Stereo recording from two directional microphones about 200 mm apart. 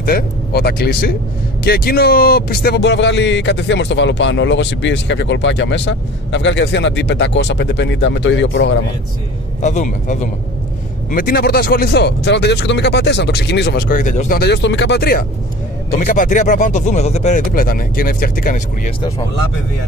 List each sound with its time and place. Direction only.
0.0 s speech: 50° left (ahead or behind)
9.6 s speech: 35° left (ahead or behind)
14.4 s speech: 60° left (ahead or behind)
16.0 s speech: 40° left (ahead or behind)